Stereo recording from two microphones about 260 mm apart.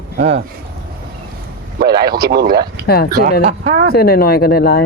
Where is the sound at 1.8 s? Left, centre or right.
Right.